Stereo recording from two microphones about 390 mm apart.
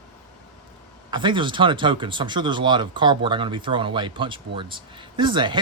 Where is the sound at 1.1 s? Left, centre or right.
Centre.